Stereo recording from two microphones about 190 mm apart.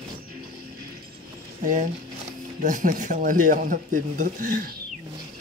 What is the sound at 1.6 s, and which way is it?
Speech, 40° right (ahead or behind).